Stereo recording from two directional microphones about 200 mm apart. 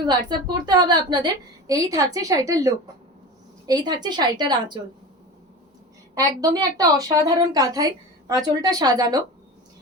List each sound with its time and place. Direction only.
0.0 s a woman's voice: 20° right (ahead or behind)
6.1 s a woman's voice: 20° right (ahead or behind)